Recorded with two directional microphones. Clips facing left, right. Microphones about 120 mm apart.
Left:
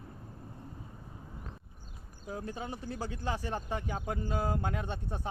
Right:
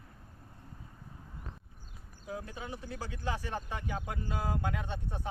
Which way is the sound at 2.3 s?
35° left (ahead or behind).